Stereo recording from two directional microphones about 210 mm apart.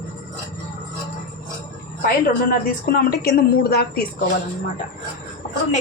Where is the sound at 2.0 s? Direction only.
40° left (ahead or behind).